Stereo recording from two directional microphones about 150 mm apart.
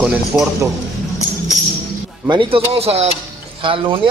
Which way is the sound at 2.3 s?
35° right (ahead or behind).